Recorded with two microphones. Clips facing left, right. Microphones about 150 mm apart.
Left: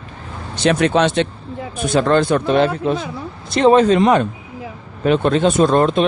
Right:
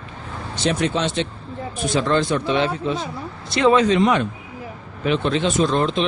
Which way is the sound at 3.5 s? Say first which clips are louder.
Left 4 dB; 40° left (ahead or behind).